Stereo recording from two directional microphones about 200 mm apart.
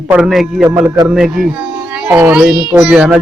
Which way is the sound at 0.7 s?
20° right (ahead or behind).